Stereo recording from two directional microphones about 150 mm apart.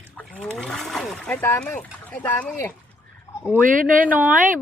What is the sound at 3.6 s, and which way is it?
Speech, 65° right (ahead or behind).